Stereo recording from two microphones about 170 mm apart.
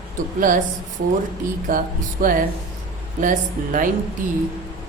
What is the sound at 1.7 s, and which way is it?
Music, 55° right (ahead or behind).